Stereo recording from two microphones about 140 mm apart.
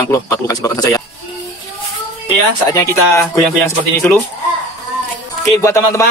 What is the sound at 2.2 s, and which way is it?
Speech, 25° left (ahead or behind).